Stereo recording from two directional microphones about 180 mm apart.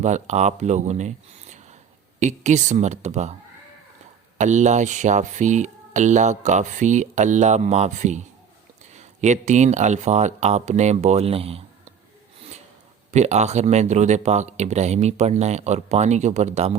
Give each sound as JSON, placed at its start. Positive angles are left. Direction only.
{"t": 0.0, "sound": "speech", "side_deg": -40}
{"t": 4.4, "sound": "speech", "side_deg": -40}
{"t": 13.1, "sound": "speech", "side_deg": -40}